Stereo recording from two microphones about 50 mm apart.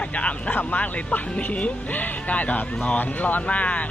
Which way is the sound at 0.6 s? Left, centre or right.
Left.